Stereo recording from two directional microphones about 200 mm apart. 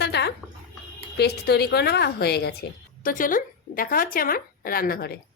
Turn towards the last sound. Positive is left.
turn(degrees=50)  # may be behind; listen again after turning